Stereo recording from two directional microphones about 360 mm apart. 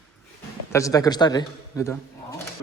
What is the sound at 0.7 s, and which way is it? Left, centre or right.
Speech, centre.